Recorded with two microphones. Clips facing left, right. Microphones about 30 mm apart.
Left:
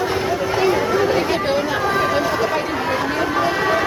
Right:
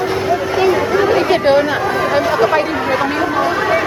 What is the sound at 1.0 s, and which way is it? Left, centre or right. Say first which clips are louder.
Speech: right 5 dB; right.